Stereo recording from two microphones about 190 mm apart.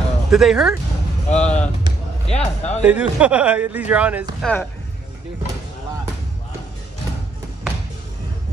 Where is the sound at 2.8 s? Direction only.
5° right (ahead or behind).